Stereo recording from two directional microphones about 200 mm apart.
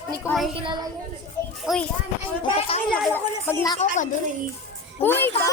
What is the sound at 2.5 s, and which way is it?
Speech, 30° left (ahead or behind).